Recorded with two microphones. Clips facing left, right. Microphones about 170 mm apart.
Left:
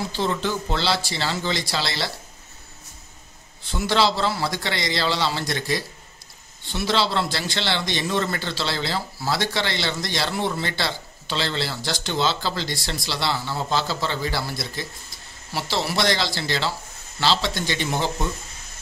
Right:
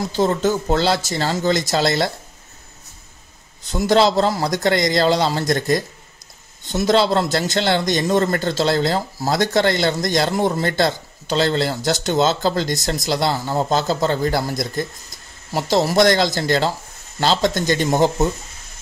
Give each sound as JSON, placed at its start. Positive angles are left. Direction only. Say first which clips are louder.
{"t": 0.0, "sound": "a man's voice", "louder": "right 7 dB", "side_deg": -45}
{"t": 3.6, "sound": "a man's voice", "louder": "right 6 dB", "side_deg": -40}